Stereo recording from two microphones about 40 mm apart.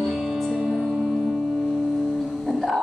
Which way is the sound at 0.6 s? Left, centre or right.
Centre.